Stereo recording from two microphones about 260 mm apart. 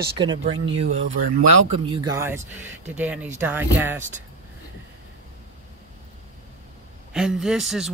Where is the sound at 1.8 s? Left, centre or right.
Centre.